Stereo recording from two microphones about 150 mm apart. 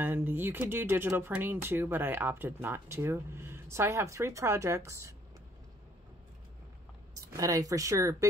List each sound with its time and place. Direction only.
0.0 s speech: 15° right (ahead or behind)
7.2 s speech: 20° right (ahead or behind)